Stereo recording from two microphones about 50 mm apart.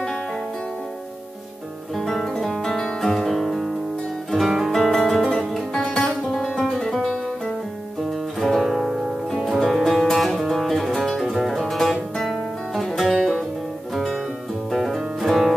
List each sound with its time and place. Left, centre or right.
2.0 s music: centre
5.5 s music: centre
14.7 s music: centre